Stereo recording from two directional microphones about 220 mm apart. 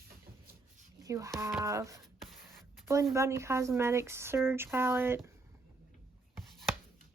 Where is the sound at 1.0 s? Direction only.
15° right (ahead or behind).